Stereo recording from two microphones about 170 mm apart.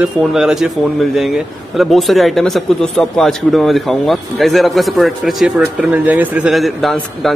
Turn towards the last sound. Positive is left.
turn(degrees=0)  # may be behind; listen again after turning